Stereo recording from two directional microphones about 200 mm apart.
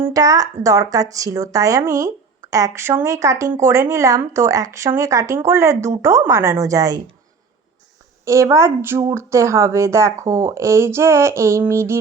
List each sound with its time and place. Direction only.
0.0 s a woman's voice: 15° right (ahead or behind)
8.2 s a woman's voice: 15° right (ahead or behind)